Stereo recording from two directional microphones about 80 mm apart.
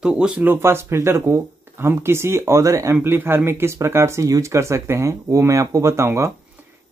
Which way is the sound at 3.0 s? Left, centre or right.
Right.